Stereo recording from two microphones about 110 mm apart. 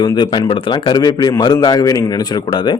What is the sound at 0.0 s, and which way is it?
A man's voice, 45° left (ahead or behind).